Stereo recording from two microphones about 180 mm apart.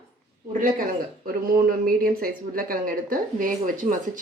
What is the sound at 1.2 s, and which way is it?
Speech, 55° right (ahead or behind).